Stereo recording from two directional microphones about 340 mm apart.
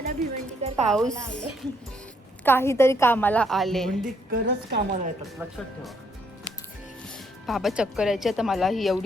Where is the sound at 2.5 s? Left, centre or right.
Centre.